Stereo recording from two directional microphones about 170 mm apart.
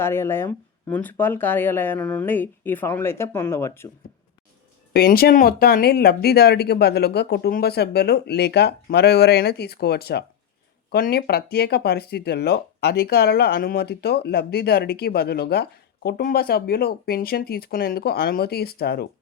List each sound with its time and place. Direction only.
0.0 s speech: 15° left (ahead or behind)
4.9 s speech: 65° left (ahead or behind)